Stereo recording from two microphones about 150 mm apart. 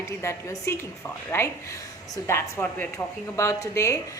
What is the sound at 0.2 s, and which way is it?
A woman's voice, 20° left (ahead or behind).